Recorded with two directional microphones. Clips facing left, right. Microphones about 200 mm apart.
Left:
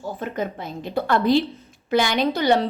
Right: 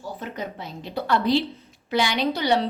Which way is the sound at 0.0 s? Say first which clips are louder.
Left 5 dB; 50° left (ahead or behind).